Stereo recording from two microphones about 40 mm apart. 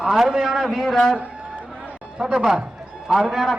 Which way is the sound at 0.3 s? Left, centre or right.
Centre.